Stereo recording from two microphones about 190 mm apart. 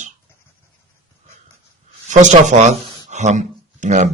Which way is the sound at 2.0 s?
40° right (ahead or behind).